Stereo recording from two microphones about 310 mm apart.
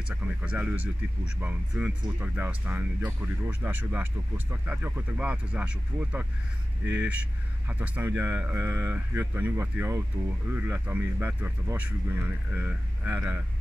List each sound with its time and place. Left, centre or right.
0.1 s speech: centre
6.8 s speech: right
7.8 s speech: centre